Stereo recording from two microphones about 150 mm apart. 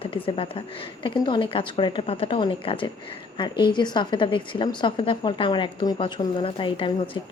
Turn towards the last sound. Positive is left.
turn(degrees=35)  # may be behind; listen again after turning